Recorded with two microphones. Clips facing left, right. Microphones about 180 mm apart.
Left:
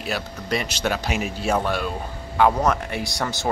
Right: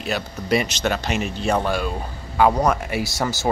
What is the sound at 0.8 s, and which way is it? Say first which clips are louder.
Speech: right 1 dB; 5° left (ahead or behind).